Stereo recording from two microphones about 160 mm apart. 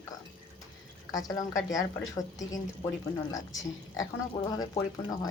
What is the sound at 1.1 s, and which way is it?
Speech, 20° left (ahead or behind).